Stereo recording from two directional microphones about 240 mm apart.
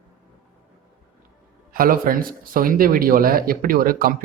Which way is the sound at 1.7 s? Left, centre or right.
Right.